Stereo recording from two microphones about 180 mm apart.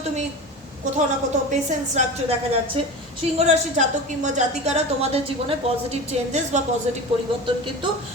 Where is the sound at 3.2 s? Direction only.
35° right (ahead or behind).